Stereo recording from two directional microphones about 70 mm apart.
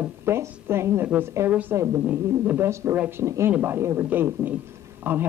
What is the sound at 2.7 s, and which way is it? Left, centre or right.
Speech, right.